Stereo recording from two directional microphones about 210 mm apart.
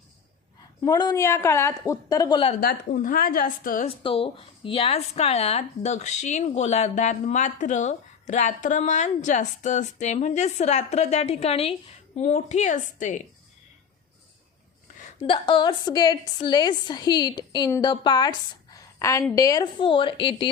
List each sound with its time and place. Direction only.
0.8 s a woman's voice: 20° left (ahead or behind)
2.6 s a woman's voice: 45° left (ahead or behind)
3.8 s a woman's voice: 25° left (ahead or behind)
15.2 s a woman's voice: 25° left (ahead or behind)